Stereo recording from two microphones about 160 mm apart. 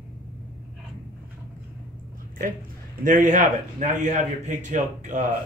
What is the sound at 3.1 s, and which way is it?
A man's voice, 55° right (ahead or behind).